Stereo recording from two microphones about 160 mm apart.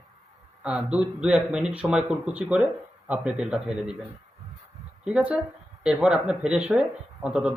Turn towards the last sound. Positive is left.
turn(degrees=-10)  # may be behind; listen again after turning